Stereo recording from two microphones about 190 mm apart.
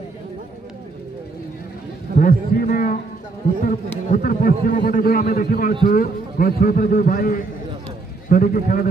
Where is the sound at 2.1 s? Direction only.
50° left (ahead or behind).